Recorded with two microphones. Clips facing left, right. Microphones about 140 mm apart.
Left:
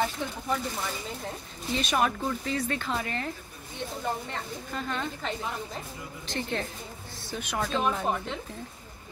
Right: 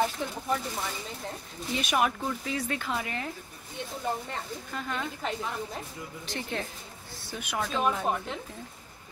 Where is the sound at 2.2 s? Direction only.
5° right (ahead or behind).